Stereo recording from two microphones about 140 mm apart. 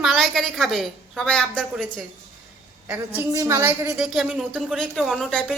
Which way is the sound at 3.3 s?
20° right (ahead or behind).